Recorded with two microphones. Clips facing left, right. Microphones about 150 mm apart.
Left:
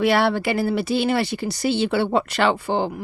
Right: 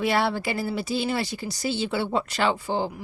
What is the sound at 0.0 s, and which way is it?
Speech, 70° left (ahead or behind).